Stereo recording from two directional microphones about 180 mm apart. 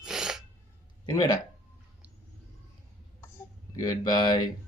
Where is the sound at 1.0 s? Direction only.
20° left (ahead or behind).